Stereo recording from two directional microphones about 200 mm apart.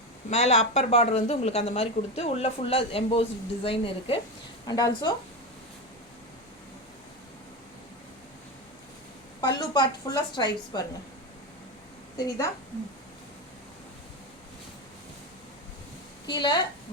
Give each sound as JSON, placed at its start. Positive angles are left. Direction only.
{"t": 0.3, "sound": "speech", "side_deg": 30}
{"t": 9.6, "sound": "speech", "side_deg": 20}
{"t": 12.1, "sound": "a woman's voice", "side_deg": 15}
{"t": 16.2, "sound": "a woman's voice", "side_deg": 20}